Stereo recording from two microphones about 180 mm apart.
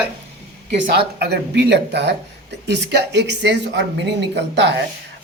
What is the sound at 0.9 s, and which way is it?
Speech, 65° right (ahead or behind).